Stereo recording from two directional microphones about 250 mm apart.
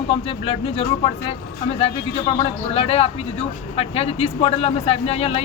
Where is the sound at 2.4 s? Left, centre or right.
Left.